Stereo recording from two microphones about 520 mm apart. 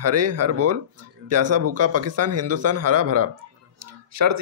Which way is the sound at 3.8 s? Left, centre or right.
Right.